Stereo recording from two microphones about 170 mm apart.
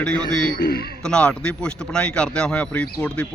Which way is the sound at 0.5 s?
65° left (ahead or behind).